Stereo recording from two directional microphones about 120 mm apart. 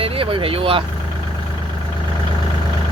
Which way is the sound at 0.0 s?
50° right (ahead or behind).